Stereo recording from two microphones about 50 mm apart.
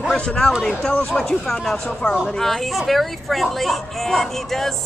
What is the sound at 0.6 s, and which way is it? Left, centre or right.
Speech, centre.